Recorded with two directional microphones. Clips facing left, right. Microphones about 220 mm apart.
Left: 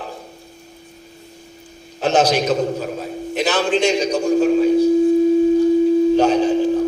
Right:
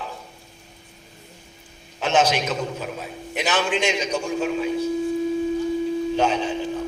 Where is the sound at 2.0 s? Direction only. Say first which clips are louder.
Left 4 dB; 35° left (ahead or behind).